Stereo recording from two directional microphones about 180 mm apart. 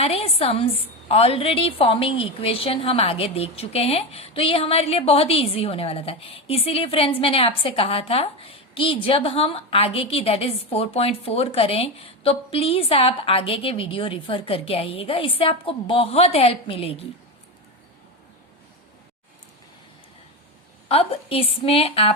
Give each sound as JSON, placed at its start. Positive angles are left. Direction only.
{"t": 0.0, "sound": "a woman's voice", "side_deg": 35}
{"t": 20.8, "sound": "a woman's voice", "side_deg": 30}